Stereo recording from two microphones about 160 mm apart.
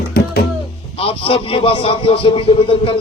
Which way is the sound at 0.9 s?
35° left (ahead or behind).